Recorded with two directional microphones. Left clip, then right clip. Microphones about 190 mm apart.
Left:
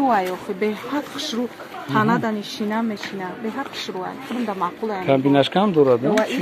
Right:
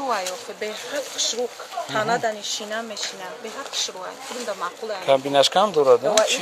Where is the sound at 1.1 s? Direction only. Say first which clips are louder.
Right 2 dB; 35° left (ahead or behind).